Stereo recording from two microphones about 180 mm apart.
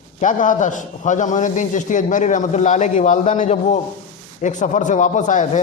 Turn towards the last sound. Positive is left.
turn(degrees=45)  # may be behind; listen again after turning